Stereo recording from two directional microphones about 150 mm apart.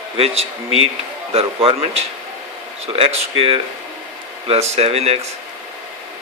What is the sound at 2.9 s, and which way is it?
Speech, 40° right (ahead or behind).